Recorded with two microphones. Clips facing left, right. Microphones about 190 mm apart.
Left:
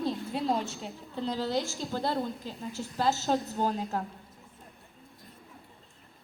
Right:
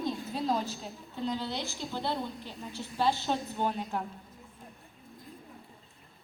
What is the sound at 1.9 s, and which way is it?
A woman's voice, 40° left (ahead or behind).